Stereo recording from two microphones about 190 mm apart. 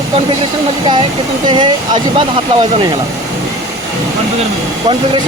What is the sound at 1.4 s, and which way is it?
Speech, 25° right (ahead or behind).